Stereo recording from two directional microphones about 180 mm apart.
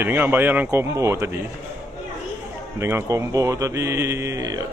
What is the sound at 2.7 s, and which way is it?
Speech, 15° right (ahead or behind).